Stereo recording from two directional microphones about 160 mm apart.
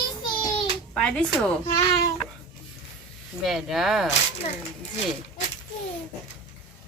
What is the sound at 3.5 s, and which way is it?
Speech, centre (ahead or behind).